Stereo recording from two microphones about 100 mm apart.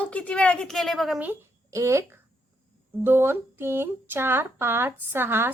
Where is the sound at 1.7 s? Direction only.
30° right (ahead or behind).